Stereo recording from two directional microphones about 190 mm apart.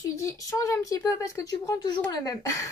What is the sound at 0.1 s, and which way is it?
A woman's voice, 15° left (ahead or behind).